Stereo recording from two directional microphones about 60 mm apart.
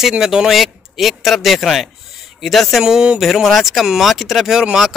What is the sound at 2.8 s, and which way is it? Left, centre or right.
Speech, centre.